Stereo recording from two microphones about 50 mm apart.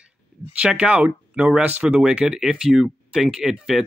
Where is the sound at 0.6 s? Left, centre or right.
Centre.